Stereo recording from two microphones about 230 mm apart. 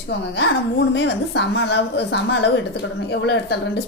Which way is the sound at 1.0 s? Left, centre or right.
Left.